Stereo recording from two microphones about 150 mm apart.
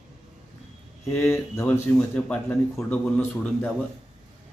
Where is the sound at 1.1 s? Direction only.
20° left (ahead or behind).